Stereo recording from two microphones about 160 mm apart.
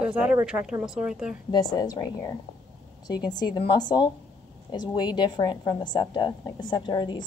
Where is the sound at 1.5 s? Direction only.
25° left (ahead or behind).